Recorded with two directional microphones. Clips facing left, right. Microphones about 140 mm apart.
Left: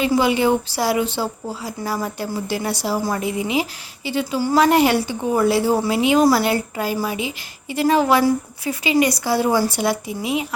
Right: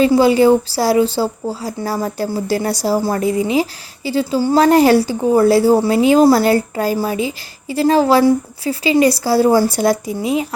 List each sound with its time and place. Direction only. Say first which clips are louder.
0.0 s speech: right 6 dB; 35° right (ahead or behind)